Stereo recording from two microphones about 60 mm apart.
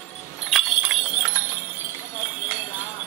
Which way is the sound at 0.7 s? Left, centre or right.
Right.